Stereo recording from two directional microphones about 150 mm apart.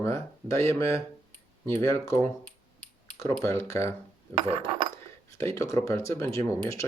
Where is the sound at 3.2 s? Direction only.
20° left (ahead or behind).